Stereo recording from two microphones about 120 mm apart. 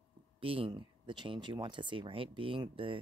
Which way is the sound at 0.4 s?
50° right (ahead or behind).